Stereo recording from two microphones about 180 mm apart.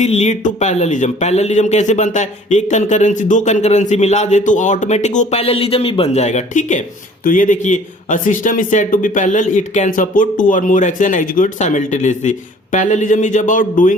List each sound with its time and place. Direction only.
0.0 s speech: 40° left (ahead or behind)